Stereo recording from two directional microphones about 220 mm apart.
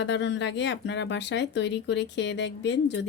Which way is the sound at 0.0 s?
55° left (ahead or behind).